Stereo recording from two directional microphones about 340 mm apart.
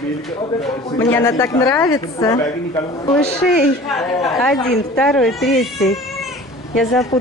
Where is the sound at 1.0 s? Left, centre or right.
Centre.